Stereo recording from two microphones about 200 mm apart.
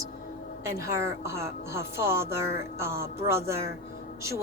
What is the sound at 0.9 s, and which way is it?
A woman's voice, 15° right (ahead or behind).